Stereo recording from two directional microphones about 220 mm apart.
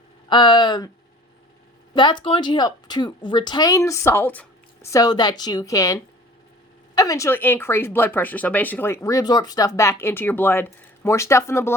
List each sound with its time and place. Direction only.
0.3 s speech: 20° left (ahead or behind)
1.9 s speech: 20° left (ahead or behind)